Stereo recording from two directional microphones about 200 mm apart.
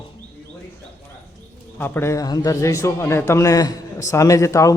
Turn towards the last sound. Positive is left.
turn(degrees=15)  # may be behind; listen again after turning